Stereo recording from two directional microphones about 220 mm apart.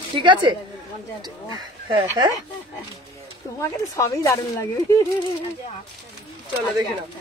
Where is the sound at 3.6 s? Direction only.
15° left (ahead or behind).